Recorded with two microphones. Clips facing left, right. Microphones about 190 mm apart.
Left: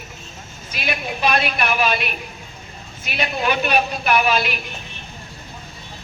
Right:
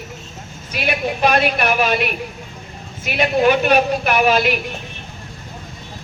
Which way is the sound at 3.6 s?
45° right (ahead or behind).